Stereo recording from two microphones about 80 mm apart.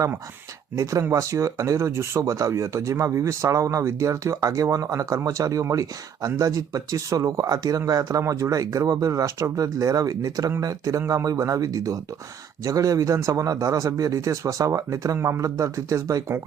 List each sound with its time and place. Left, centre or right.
0.8 s speech: right